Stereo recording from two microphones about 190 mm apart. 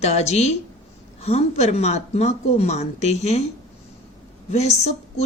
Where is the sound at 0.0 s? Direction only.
35° left (ahead or behind).